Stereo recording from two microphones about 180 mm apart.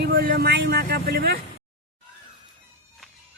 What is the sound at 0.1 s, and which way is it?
Speech, 55° right (ahead or behind).